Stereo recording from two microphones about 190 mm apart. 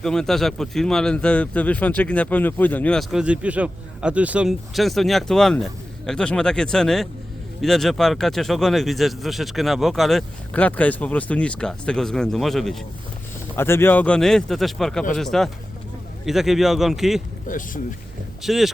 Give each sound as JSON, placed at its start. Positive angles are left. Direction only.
{"t": 0.0, "sound": "speech", "side_deg": 5}
{"t": 13.6, "sound": "speech", "side_deg": 10}
{"t": 17.5, "sound": "speech", "side_deg": 45}
{"t": 18.4, "sound": "speech", "side_deg": 0}